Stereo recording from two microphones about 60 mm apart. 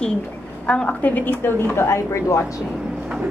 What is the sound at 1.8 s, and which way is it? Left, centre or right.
Speech, left.